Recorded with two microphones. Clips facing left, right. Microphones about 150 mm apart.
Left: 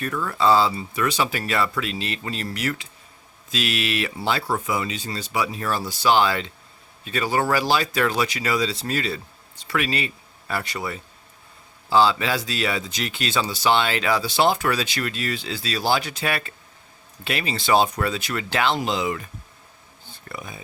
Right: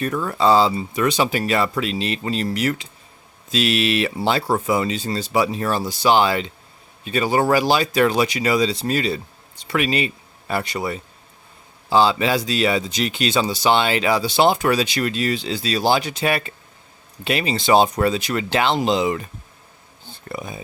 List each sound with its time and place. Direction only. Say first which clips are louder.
0.0 s speech: right 3 dB; 25° right (ahead or behind)